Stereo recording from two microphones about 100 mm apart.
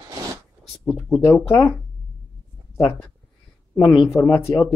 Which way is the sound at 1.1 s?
25° left (ahead or behind).